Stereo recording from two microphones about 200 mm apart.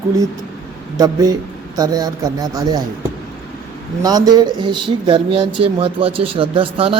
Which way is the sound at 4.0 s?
20° right (ahead or behind).